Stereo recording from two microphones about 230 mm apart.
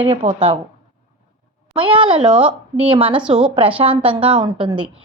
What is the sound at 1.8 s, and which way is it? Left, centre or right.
A woman's voice, right.